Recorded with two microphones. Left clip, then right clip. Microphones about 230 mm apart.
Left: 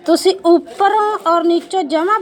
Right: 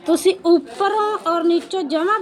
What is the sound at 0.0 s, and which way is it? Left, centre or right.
Speech, centre.